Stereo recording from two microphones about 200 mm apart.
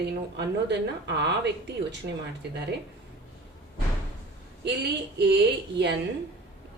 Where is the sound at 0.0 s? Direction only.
55° right (ahead or behind).